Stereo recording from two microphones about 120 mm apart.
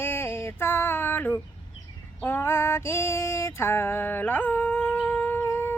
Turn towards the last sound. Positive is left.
turn(degrees=15)  # may be behind; listen again after turning